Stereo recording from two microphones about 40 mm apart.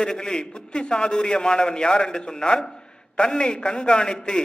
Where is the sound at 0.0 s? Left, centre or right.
Left.